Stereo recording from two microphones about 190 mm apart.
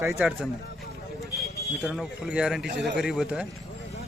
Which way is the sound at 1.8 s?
Centre (ahead or behind).